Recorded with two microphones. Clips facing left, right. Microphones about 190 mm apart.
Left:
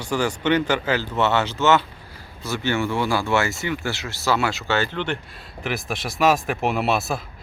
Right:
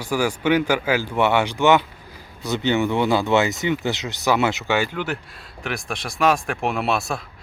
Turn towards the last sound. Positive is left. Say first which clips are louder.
# left 1 dB
turn(degrees=0)  # may be behind; listen again after turning